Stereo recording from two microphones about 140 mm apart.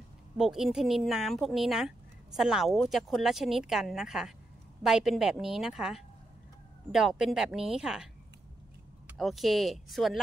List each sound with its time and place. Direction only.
0.4 s speech: 5° right (ahead or behind)
9.1 s speech: centre (ahead or behind)